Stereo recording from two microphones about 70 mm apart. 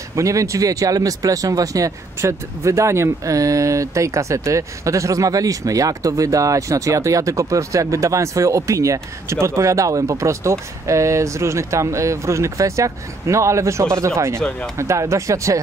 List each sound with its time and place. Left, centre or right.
0.1 s speech: right